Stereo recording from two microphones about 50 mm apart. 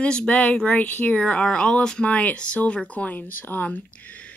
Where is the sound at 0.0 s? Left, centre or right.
Left.